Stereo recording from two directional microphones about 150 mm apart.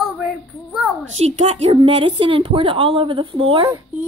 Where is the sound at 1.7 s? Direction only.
35° right (ahead or behind).